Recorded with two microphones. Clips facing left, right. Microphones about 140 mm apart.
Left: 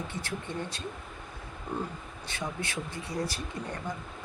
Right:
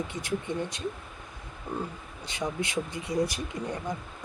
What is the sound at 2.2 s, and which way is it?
Speech, 15° right (ahead or behind).